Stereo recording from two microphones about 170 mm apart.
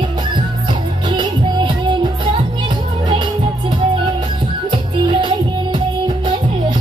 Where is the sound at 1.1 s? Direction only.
30° right (ahead or behind).